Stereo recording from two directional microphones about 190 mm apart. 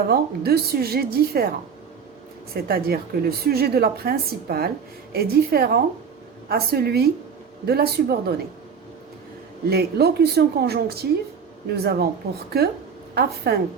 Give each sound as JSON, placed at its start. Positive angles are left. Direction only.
{"t": 0.1, "sound": "a woman's voice", "side_deg": -55}
{"t": 9.6, "sound": "a woman's voice", "side_deg": -55}